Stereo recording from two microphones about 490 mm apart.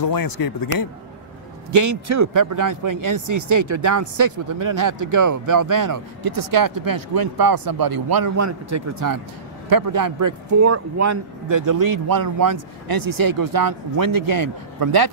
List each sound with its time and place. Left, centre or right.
0.0 s speech: left
1.7 s a man's voice: right